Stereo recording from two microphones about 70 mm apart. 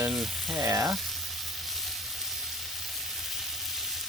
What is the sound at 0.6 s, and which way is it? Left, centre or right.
Frying, right.